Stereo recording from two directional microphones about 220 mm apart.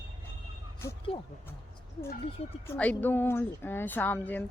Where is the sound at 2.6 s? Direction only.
5° left (ahead or behind).